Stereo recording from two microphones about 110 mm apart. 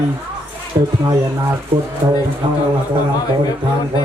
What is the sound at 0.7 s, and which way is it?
Speech, 40° right (ahead or behind).